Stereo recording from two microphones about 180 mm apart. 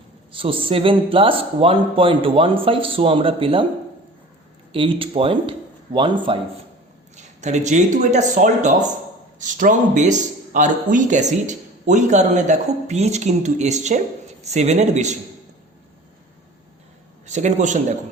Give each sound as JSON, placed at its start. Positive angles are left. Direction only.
{"t": 0.3, "sound": "speech", "side_deg": -30}
{"t": 4.7, "sound": "speech", "side_deg": -30}
{"t": 7.2, "sound": "speech", "side_deg": -40}
{"t": 17.2, "sound": "speech", "side_deg": -40}